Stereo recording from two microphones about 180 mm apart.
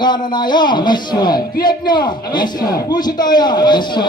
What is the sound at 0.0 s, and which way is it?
A man's voice, 25° left (ahead or behind).